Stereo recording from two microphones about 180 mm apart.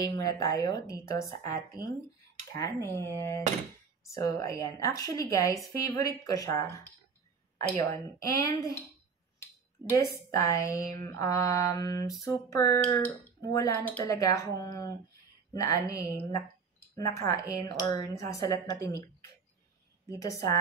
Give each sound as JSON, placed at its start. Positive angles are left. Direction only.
{"t": 0.0, "sound": "a woman's voice", "side_deg": 20}
{"t": 7.8, "sound": "speech", "side_deg": 20}
{"t": 9.8, "sound": "a woman's voice", "side_deg": -20}
{"t": 10.1, "sound": "a woman's voice", "side_deg": 15}
{"t": 10.9, "sound": "mantra", "side_deg": -55}
{"t": 11.1, "sound": "speech", "side_deg": 15}
{"t": 20.1, "sound": "speech", "side_deg": 20}